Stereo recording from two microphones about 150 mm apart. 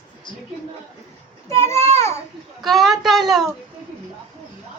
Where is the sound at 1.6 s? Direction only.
20° left (ahead or behind).